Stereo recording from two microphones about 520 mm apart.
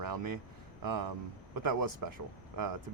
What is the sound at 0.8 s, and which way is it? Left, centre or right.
Speech, right.